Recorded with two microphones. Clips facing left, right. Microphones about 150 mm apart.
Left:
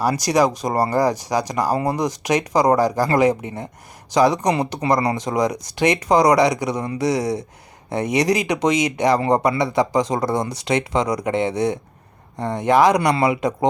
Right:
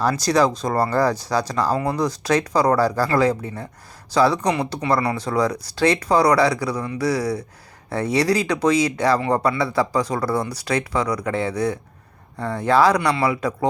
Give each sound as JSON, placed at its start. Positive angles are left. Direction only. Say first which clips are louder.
{"t": 0.0, "sound": "speech", "louder": "left 1 dB", "side_deg": 15}